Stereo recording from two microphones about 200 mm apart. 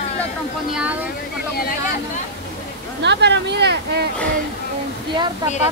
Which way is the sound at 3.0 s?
60° right (ahead or behind).